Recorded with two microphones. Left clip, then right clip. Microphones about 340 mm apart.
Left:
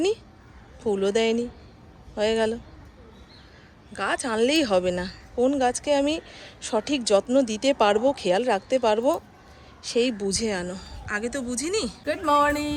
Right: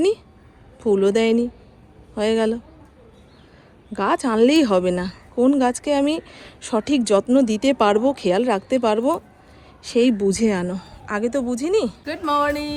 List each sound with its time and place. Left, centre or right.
0.9 s a woman's voice: centre
3.9 s a woman's voice: centre